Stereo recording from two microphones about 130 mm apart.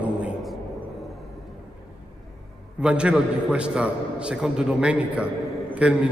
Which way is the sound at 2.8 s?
10° right (ahead or behind).